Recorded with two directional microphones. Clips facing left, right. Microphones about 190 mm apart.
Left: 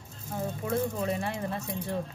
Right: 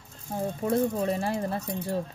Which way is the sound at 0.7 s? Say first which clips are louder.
Right 4 dB; 35° right (ahead or behind).